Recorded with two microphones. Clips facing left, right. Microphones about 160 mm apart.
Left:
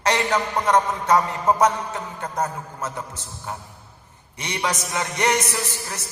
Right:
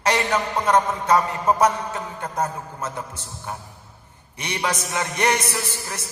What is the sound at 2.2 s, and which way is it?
A man's voice, 10° right (ahead or behind).